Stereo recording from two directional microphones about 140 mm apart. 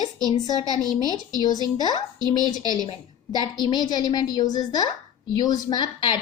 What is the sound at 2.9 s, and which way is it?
A woman's voice, 30° left (ahead or behind).